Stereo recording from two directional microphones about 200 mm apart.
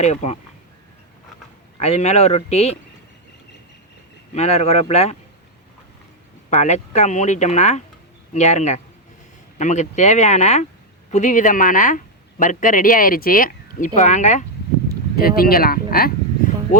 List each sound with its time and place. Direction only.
0.0 s speech: 35° left (ahead or behind)
1.8 s speech: 35° left (ahead or behind)
4.4 s speech: 30° left (ahead or behind)
6.5 s speech: 35° left (ahead or behind)
15.2 s speech: 50° left (ahead or behind)